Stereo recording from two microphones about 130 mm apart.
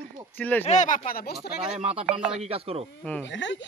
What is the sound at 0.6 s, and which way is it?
Speech, 65° left (ahead or behind).